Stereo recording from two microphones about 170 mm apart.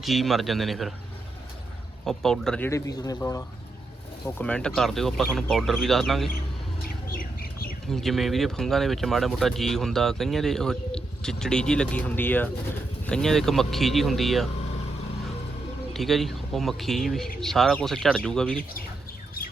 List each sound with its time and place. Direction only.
0.0 s speech: centre (ahead or behind)
2.0 s speech: centre (ahead or behind)
2.6 s speech: 20° left (ahead or behind); by 6.2 s centre (ahead or behind)
6.8 s bird: 60° left (ahead or behind)
7.9 s speech: centre (ahead or behind)
15.9 s speech: centre (ahead or behind)